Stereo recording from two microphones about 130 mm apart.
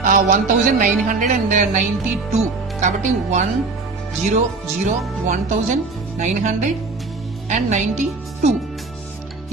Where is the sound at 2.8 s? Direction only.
70° right (ahead or behind).